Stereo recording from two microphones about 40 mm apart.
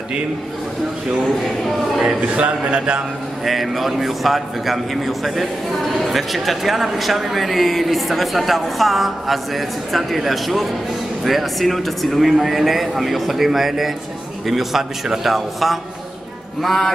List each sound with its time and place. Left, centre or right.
2.2 s a man's voice: right
3.4 s a man's voice: centre
16.6 s a sound: centre